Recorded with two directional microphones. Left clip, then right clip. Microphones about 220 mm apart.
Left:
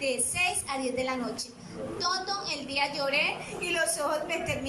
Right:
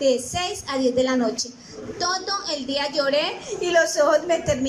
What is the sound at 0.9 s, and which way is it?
A woman's voice, 35° right (ahead or behind).